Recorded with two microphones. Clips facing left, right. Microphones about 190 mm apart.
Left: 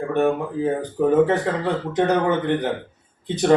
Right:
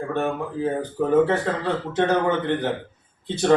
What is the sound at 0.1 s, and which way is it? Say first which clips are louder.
A man's voice: left 6 dB; 15° left (ahead or behind).